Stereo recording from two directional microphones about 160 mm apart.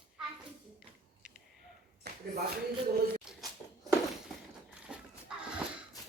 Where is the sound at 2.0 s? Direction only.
90° right.